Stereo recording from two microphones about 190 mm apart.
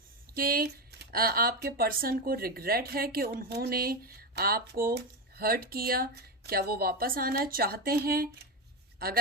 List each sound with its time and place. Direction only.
0.3 s speech: 50° right (ahead or behind)